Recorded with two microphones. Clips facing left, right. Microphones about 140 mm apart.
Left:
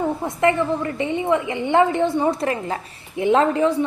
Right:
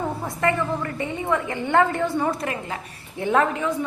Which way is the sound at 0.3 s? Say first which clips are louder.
Left 4 dB; 20° left (ahead or behind).